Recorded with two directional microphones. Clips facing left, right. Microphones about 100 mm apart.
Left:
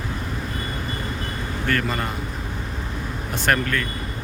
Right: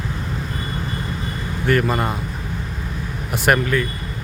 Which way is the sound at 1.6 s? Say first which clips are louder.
Right 6 dB; 15° right (ahead or behind).